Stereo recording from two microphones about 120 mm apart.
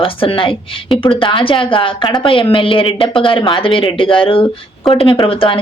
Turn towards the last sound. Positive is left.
turn(degrees=50)  # may be behind; listen again after turning